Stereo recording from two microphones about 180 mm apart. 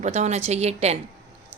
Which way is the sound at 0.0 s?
40° right (ahead or behind).